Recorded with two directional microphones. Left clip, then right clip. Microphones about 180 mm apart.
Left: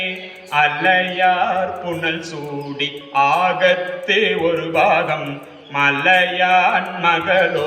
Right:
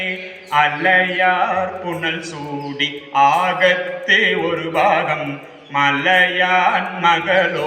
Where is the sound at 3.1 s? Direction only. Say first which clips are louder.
Right 1 dB; 15° left (ahead or behind).